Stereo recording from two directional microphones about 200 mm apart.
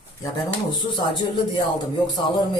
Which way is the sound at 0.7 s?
20° left (ahead or behind).